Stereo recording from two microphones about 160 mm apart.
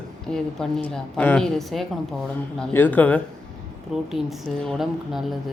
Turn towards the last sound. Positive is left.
turn(degrees=0)  # may be behind; listen again after turning